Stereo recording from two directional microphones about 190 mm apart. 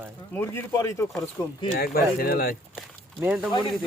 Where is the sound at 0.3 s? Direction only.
15° left (ahead or behind).